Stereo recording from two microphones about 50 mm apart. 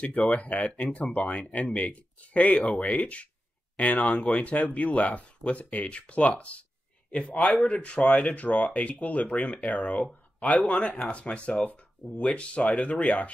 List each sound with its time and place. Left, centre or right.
0.0 s speech: left
7.6 s speech: left